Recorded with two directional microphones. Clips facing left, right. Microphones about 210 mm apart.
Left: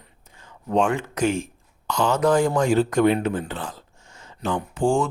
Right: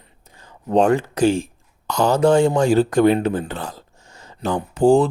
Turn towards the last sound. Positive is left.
turn(degrees=-35)  # may be behind; listen again after turning